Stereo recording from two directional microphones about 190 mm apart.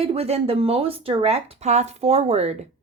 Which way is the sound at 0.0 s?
30° right (ahead or behind).